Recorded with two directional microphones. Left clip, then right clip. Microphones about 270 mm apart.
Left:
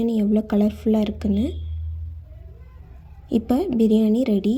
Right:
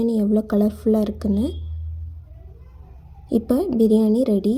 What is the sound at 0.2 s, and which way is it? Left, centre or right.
Speech, centre.